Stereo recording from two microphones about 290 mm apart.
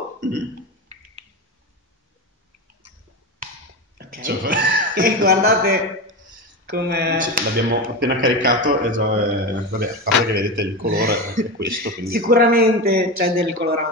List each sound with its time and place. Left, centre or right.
4.0 s a man's voice: right